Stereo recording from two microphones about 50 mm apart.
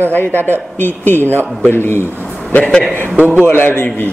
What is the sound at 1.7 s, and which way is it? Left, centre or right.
Speech, left.